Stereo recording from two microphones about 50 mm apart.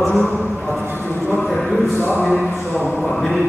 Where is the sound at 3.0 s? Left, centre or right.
Centre.